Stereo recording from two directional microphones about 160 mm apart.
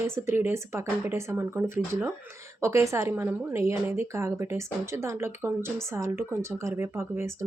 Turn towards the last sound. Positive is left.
turn(degrees=-15)  # may be behind; listen again after turning